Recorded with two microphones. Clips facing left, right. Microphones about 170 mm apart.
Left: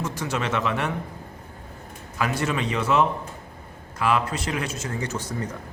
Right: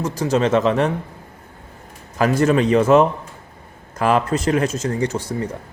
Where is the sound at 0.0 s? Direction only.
35° right (ahead or behind).